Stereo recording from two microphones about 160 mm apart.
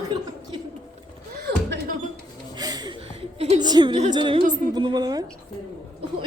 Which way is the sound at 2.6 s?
25° right (ahead or behind).